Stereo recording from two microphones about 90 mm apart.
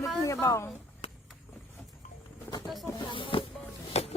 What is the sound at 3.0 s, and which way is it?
Music, 70° left (ahead or behind).